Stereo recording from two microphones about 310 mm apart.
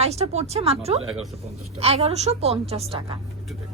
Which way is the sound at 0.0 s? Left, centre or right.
Centre.